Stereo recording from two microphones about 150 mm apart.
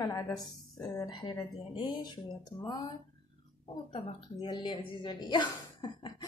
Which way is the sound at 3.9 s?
35° left (ahead or behind).